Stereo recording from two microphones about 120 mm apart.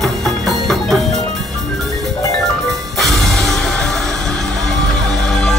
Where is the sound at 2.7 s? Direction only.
Centre (ahead or behind).